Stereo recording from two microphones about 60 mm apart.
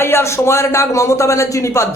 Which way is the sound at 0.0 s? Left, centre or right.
Left.